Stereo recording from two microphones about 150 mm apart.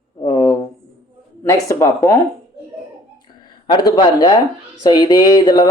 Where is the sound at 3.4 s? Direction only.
30° left (ahead or behind).